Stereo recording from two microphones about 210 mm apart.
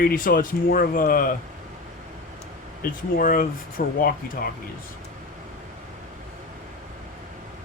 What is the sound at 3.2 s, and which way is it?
Speech, 40° left (ahead or behind).